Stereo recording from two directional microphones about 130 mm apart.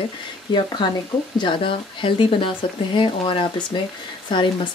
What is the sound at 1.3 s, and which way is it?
Speech, 40° left (ahead or behind).